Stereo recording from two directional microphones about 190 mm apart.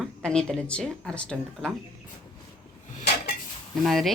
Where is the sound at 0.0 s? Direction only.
5° left (ahead or behind).